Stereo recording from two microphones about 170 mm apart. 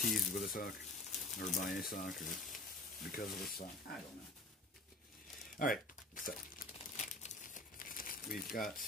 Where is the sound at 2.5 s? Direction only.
55° left (ahead or behind).